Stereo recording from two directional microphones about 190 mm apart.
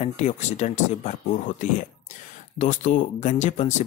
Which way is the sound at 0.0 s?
35° left (ahead or behind).